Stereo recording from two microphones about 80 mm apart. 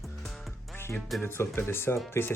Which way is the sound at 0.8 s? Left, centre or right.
Left.